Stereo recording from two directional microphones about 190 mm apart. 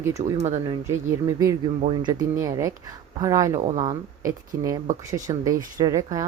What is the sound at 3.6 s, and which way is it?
Speech, 40° right (ahead or behind).